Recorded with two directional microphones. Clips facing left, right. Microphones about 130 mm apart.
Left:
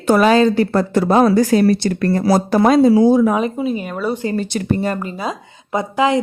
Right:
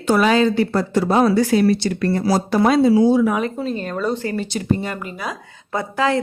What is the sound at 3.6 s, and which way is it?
Speech, 10° left (ahead or behind).